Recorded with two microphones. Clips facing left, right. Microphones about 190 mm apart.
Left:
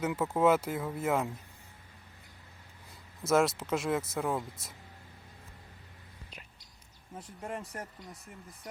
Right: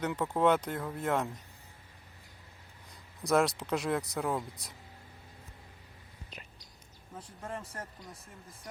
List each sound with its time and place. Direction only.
0.0 s speech: 5° left (ahead or behind)
3.2 s speech: centre (ahead or behind)
7.2 s speech: 20° left (ahead or behind)